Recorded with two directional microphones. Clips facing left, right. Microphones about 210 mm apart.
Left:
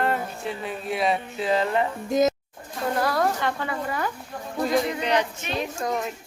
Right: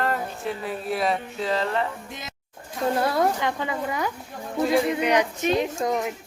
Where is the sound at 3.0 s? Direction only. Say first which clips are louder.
Even; 25° right (ahead or behind).